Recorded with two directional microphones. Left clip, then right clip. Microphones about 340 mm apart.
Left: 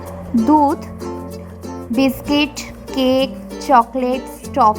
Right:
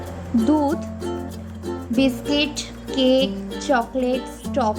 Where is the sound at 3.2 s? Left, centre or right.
Centre.